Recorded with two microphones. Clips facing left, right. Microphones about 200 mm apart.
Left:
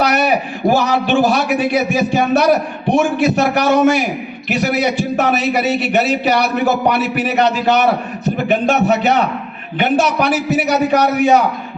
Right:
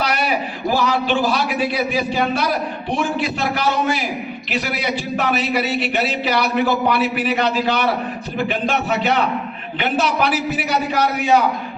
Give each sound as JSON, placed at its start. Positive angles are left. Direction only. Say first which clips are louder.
{"t": 0.0, "sound": "a man's voice", "louder": "left 6 dB", "side_deg": 50}